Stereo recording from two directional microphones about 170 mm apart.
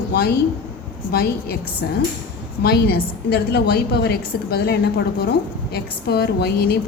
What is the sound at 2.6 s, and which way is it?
A woman's voice, 65° left (ahead or behind).